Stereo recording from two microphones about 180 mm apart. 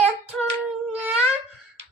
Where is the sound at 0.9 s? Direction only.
10° right (ahead or behind).